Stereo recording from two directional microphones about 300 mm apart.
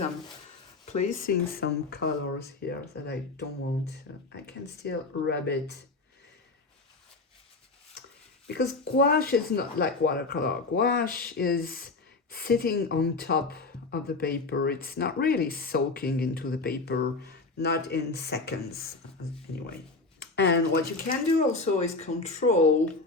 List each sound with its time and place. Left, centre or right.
0.9 s speech: left
8.4 s speech: left
20.1 s speech: left